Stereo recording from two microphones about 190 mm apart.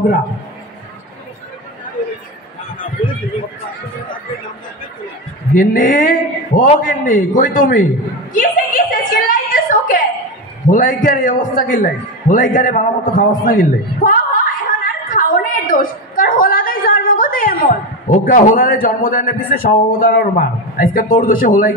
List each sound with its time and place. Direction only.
5.5 s a man's voice: 45° left (ahead or behind)
8.3 s a sound: 45° left (ahead or behind)
10.7 s a man's voice: 45° left (ahead or behind)